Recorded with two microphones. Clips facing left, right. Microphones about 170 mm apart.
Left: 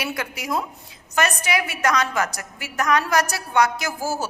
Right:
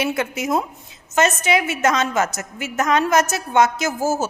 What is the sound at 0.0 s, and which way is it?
A woman's voice, 25° right (ahead or behind).